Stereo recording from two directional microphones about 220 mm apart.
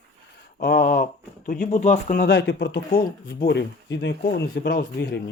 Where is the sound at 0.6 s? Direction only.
40° left (ahead or behind).